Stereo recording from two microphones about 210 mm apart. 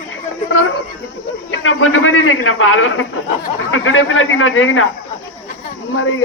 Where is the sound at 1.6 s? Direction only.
70° left (ahead or behind).